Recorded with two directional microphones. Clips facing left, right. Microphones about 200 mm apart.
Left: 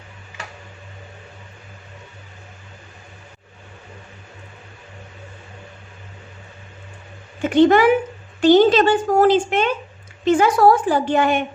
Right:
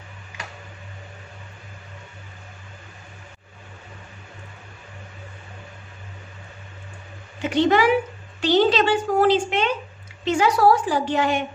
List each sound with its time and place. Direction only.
7.4 s a woman's voice: 50° left (ahead or behind)